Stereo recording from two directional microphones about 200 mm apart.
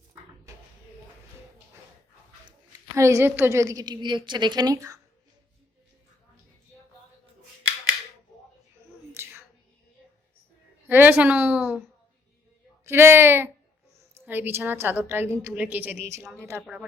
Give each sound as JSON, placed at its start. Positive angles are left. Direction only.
{"t": 2.9, "sound": "a woman's voice", "side_deg": -15}
{"t": 9.2, "sound": "a sound", "side_deg": -10}
{"t": 10.8, "sound": "a woman's voice", "side_deg": -10}
{"t": 12.9, "sound": "a woman's voice", "side_deg": -10}